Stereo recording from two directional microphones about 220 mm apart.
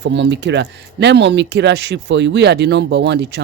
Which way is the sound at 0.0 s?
55° right (ahead or behind).